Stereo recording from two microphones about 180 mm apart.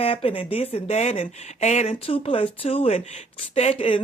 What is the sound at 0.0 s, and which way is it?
Speech, 30° left (ahead or behind).